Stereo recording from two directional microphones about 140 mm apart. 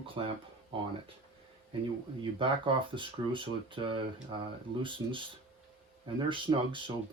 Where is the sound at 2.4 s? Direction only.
40° right (ahead or behind).